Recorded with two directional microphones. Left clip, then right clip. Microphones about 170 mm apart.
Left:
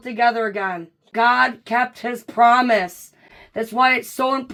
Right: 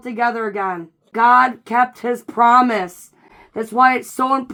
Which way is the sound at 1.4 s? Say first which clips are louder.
Right 3 dB; 15° left (ahead or behind).